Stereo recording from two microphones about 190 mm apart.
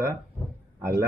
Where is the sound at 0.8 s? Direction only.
15° right (ahead or behind).